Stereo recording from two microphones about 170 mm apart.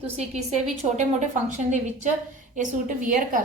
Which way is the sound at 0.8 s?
45° right (ahead or behind).